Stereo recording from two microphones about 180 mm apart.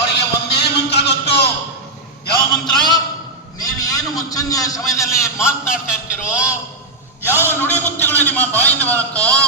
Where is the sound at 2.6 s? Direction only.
25° left (ahead or behind).